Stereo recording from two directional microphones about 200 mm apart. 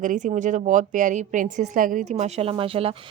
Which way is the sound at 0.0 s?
40° right (ahead or behind).